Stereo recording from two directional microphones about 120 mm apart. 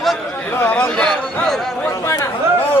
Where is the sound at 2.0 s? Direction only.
25° left (ahead or behind).